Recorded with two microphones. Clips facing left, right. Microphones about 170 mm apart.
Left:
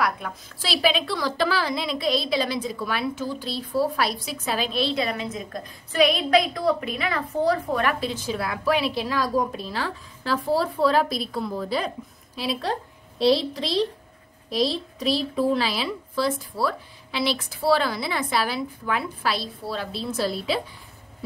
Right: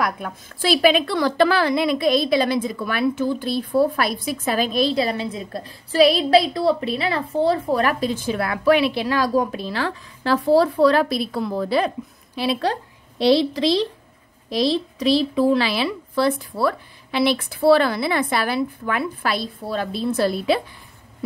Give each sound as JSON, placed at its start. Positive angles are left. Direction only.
{"t": 0.0, "sound": "a woman's voice", "side_deg": -50}
{"t": 13.2, "sound": "a woman's voice", "side_deg": -85}